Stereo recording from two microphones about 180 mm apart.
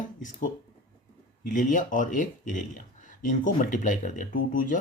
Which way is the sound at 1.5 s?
45° left (ahead or behind).